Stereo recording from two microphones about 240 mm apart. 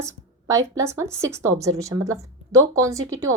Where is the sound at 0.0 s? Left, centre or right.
Centre.